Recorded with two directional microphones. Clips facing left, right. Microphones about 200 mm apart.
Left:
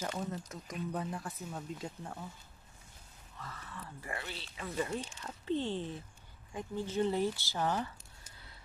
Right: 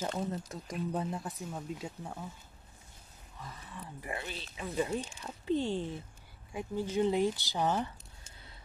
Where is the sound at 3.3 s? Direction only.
15° right (ahead or behind).